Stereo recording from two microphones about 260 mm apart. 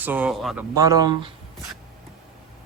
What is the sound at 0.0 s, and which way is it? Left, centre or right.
Speech, centre.